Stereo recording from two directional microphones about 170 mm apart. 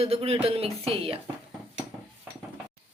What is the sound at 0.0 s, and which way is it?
Speech, 35° right (ahead or behind).